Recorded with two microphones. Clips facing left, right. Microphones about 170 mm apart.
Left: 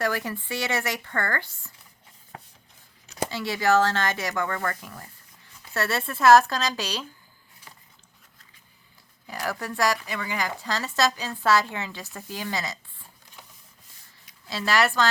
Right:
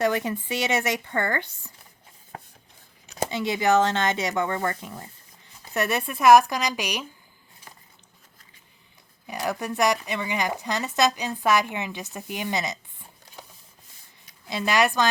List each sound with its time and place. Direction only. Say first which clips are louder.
0.0 s speech: right 4 dB; 20° right (ahead or behind)
3.2 s speech: right 1 dB; 20° right (ahead or behind)
9.2 s speech: right 3 dB; 20° right (ahead or behind)
14.4 s speech: right 1 dB; 20° right (ahead or behind)